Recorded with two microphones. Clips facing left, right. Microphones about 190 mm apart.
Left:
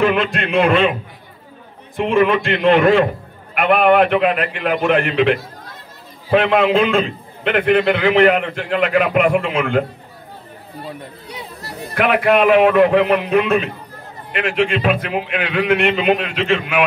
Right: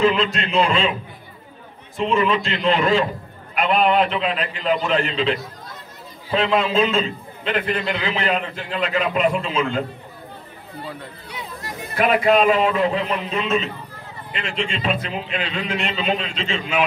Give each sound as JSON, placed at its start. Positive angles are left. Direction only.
{"t": 0.0, "sound": "a man's voice", "side_deg": 55}
{"t": 2.0, "sound": "a man's voice", "side_deg": 55}
{"t": 11.2, "sound": "chatter", "side_deg": 35}
{"t": 11.9, "sound": "a man's voice", "side_deg": 65}